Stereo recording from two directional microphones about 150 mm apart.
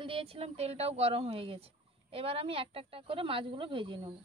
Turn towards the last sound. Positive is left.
turn(degrees=-35)  # may be behind; listen again after turning